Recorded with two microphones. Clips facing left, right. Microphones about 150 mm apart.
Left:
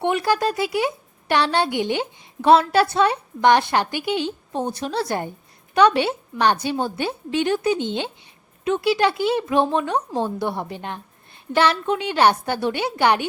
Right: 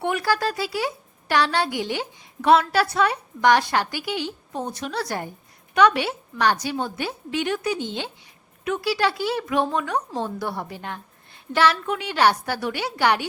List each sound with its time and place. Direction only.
0.0 s speech: 20° left (ahead or behind)